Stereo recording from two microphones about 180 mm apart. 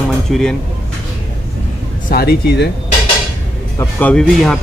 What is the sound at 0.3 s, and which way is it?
Speech, 5° left (ahead or behind).